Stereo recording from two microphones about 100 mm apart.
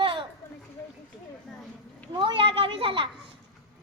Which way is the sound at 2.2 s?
60° right (ahead or behind).